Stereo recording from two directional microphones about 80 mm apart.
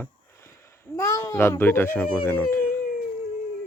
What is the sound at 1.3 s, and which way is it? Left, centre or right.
Speech, left.